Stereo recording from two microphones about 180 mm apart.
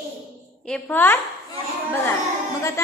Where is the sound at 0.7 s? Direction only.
5° left (ahead or behind).